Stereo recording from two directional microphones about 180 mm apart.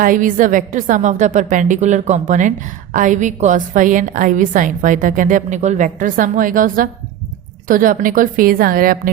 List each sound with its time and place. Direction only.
0.0 s a woman's voice: 50° right (ahead or behind)